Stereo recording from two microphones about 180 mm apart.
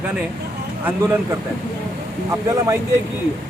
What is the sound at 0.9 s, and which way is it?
Speech, 15° right (ahead or behind).